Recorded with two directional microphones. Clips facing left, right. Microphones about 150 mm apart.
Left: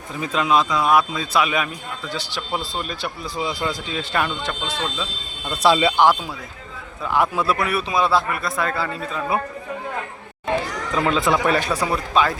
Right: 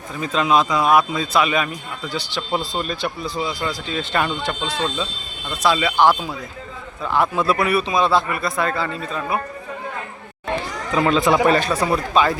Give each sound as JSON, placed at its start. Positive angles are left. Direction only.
{"t": 0.4, "sound": "speech", "side_deg": 0}
{"t": 5.6, "sound": "speech", "side_deg": 30}
{"t": 7.0, "sound": "a man's voice", "side_deg": 10}
{"t": 7.4, "sound": "speech", "side_deg": 0}
{"t": 10.9, "sound": "a man's voice", "side_deg": 0}
{"t": 12.1, "sound": "speech", "side_deg": 0}